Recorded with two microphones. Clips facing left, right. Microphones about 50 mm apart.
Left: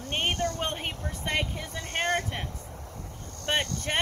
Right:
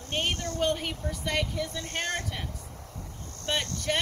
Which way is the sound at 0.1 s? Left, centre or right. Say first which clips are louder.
Left 2 dB; left.